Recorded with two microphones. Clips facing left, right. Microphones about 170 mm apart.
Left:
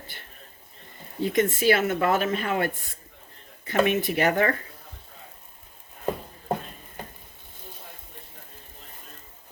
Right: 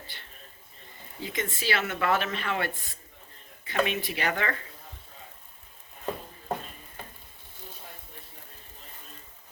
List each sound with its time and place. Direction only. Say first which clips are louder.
1.2 s speech: left 11 dB; 55° left (ahead or behind)